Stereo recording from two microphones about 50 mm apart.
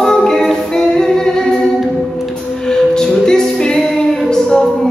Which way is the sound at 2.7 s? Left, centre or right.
Centre.